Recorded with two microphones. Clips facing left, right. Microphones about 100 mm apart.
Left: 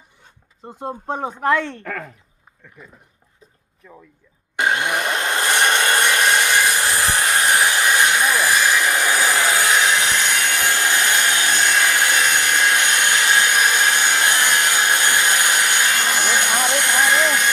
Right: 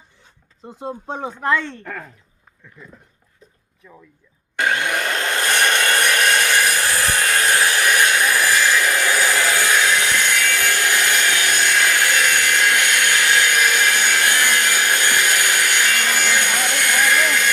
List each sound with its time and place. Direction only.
0.6 s speech: 50° left (ahead or behind); by 2.0 s 90° left
2.8 s speech: 15° left (ahead or behind)
4.5 s wood: 25° left (ahead or behind)